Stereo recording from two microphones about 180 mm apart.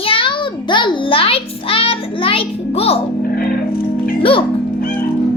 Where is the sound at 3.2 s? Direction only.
55° left (ahead or behind).